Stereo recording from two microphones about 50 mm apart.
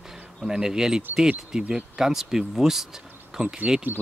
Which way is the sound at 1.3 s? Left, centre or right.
Right.